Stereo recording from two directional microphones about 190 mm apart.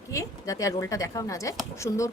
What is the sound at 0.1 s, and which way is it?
Speech, 15° left (ahead or behind).